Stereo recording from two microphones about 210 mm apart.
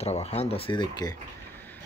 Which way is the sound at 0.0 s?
30° left (ahead or behind).